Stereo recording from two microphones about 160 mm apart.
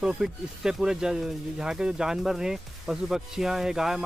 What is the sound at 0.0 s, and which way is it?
Speech, 5° right (ahead or behind).